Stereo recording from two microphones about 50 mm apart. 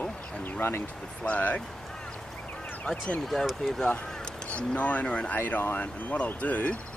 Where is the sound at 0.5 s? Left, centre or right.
Left.